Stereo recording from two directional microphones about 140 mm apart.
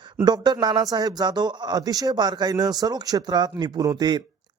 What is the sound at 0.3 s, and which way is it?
Speech, 30° right (ahead or behind).